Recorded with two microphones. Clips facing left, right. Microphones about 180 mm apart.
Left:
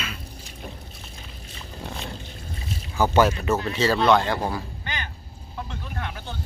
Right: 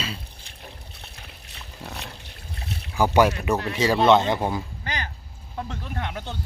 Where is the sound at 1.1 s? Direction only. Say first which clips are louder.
Left 3 dB; 65° right (ahead or behind).